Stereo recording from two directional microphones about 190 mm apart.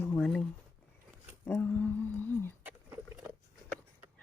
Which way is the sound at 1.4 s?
10° left (ahead or behind).